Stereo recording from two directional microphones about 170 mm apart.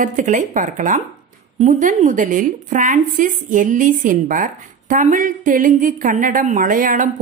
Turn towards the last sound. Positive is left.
turn(degrees=-50)  # may be behind; listen again after turning